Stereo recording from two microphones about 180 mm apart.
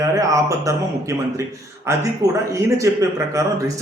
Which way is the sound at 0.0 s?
20° right (ahead or behind).